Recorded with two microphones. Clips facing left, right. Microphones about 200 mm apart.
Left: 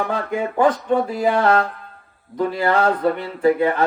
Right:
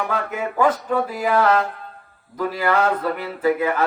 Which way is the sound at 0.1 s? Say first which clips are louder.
Left 2 dB; 30° left (ahead or behind).